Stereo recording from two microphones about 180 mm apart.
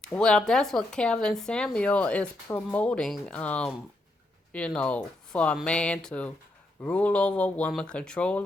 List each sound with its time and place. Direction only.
0.0 s speech: 5° left (ahead or behind)